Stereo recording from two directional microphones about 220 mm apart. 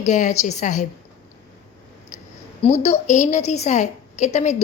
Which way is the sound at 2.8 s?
30° left (ahead or behind).